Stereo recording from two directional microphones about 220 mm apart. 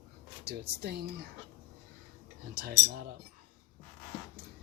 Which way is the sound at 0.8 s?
45° right (ahead or behind).